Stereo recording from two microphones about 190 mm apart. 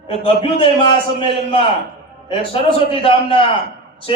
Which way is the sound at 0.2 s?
30° left (ahead or behind).